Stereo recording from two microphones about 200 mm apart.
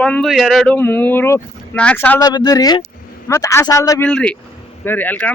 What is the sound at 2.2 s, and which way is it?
A man's voice, 20° left (ahead or behind).